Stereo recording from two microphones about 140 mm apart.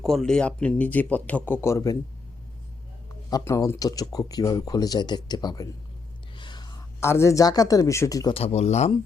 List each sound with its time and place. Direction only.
0.0 s speech: centre (ahead or behind); by 2.0 s 25° left (ahead or behind)
3.2 s speech: 25° left (ahead or behind)
6.3 s whispering: 35° left (ahead or behind)
7.0 s speech: 20° left (ahead or behind)
8.3 s speech: 45° left (ahead or behind)